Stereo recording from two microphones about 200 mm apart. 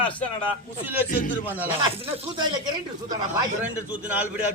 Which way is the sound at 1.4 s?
10° right (ahead or behind).